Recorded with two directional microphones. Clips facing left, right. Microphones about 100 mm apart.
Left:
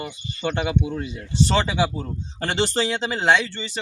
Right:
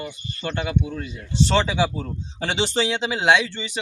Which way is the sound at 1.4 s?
5° left (ahead or behind).